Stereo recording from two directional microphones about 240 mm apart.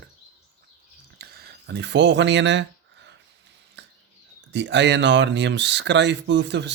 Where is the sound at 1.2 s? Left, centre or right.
Right.